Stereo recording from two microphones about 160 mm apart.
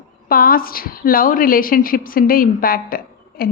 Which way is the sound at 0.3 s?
65° left (ahead or behind).